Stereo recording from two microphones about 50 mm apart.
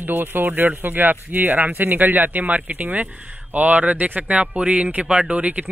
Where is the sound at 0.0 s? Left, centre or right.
Right.